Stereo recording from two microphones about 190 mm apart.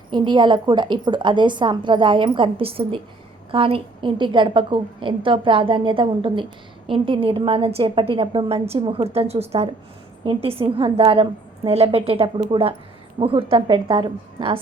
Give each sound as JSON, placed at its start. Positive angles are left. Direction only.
{"t": 0.1, "sound": "a woman's voice", "side_deg": -25}